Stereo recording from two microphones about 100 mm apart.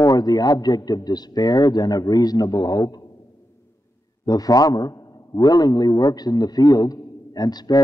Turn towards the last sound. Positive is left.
turn(degrees=40)  # may be behind; listen again after turning